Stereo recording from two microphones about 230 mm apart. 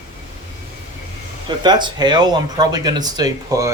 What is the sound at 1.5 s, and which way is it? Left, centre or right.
Speech, centre.